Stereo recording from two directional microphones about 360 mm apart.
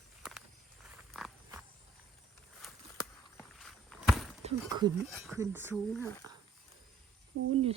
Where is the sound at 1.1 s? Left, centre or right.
Centre.